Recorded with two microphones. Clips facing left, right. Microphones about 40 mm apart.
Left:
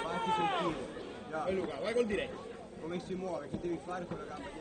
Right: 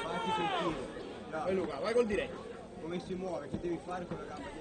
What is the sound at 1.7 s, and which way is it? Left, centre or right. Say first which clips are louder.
Speech: right 3 dB; left.